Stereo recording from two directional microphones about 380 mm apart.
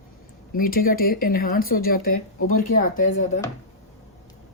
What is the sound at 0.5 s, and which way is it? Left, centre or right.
Speech, left.